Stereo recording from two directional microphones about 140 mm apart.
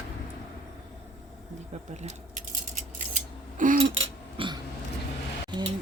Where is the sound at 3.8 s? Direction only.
40° right (ahead or behind).